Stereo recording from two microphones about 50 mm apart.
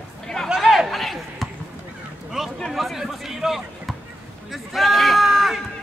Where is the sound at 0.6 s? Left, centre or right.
Centre.